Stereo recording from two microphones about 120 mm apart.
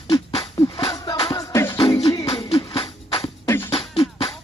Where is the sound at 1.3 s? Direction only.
25° left (ahead or behind).